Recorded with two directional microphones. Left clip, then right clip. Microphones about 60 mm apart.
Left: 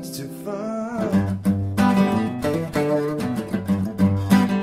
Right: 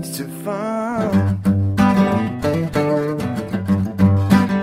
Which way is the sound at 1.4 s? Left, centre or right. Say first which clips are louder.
Right 4 dB; right.